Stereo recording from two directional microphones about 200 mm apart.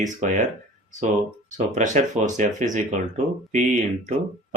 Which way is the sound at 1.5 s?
35° right (ahead or behind).